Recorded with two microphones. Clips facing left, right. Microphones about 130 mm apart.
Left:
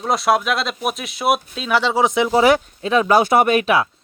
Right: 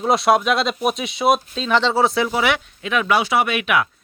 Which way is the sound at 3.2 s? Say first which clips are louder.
Left 5 dB; 50° left (ahead or behind).